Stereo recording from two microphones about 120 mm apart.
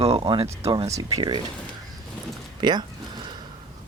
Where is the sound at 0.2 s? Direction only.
40° right (ahead or behind).